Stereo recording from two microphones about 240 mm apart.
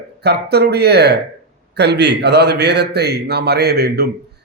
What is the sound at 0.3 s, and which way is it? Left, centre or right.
A man's voice, right.